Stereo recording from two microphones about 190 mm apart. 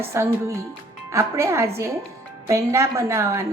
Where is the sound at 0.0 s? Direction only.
15° right (ahead or behind).